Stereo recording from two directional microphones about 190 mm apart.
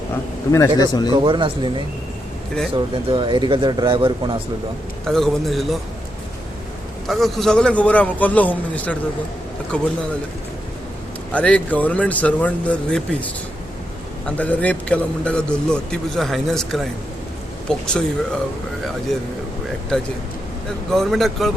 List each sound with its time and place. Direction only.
0.5 s speech: 15° left (ahead or behind)
1.1 s speech: 25° right (ahead or behind)
2.7 s speech: 25° right (ahead or behind)
5.0 s a man's voice: centre (ahead or behind)
7.1 s a man's voice: centre (ahead or behind)
11.3 s a man's voice: 5° left (ahead or behind)
20.9 s a man's voice: centre (ahead or behind)